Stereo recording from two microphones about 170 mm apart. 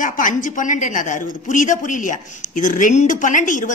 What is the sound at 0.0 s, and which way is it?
A woman's voice, 50° left (ahead or behind).